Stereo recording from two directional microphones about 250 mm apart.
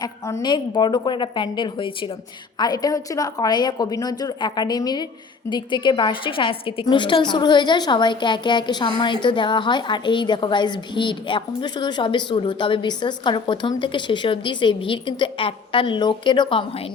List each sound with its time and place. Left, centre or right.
0.0 s a woman's voice: centre